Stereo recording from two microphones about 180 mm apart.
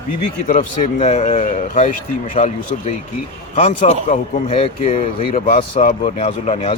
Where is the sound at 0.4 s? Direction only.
50° left (ahead or behind); by 5.8 s 30° left (ahead or behind).